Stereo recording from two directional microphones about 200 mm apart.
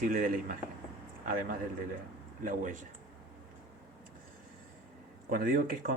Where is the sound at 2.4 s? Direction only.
40° right (ahead or behind).